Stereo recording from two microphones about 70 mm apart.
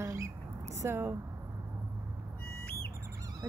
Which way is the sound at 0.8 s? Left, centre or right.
Right.